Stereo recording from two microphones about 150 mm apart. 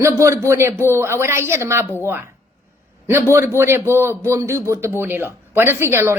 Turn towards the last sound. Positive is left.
turn(degrees=-15)  # may be behind; listen again after turning